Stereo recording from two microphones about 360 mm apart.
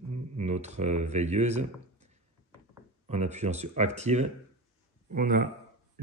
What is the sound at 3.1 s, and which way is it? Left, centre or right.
Speech, centre.